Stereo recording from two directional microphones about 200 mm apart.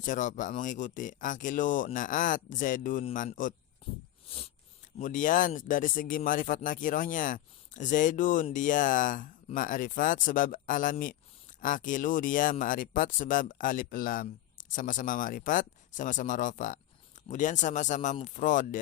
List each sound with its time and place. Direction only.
0.0 s speech: 40° left (ahead or behind)
3.8 s a sound: 25° left (ahead or behind)
4.9 s speech: 40° left (ahead or behind)